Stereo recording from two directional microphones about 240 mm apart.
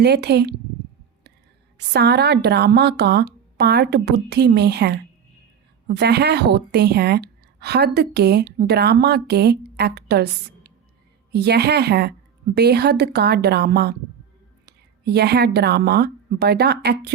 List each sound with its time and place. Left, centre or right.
0.0 s a woman's voice: right
1.9 s a woman's voice: right